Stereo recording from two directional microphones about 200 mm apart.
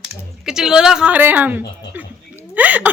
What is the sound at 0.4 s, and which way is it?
Speech, 5° right (ahead or behind).